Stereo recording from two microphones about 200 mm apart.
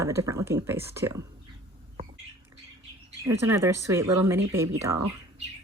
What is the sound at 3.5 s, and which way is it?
Speech, 15° right (ahead or behind).